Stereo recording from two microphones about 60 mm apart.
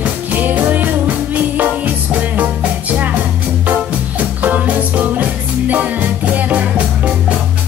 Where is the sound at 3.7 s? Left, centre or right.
Right.